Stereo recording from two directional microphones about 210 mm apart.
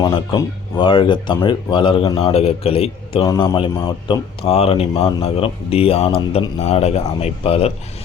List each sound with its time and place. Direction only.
0.0 s speech: 15° left (ahead or behind)